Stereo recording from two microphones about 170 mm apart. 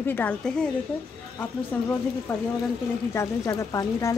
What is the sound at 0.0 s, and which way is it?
Speech, 10° left (ahead or behind).